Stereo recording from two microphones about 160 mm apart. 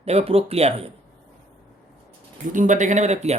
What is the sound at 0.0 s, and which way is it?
Speech, 40° right (ahead or behind).